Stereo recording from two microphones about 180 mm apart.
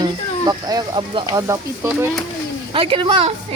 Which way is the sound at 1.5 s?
15° right (ahead or behind).